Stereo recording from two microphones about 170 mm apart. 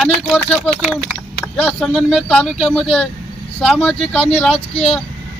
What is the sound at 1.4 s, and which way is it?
Speech, 5° left (ahead or behind).